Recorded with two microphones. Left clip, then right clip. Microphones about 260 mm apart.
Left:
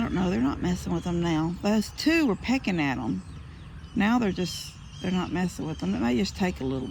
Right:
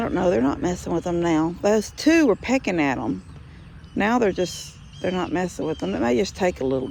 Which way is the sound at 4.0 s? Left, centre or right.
Right.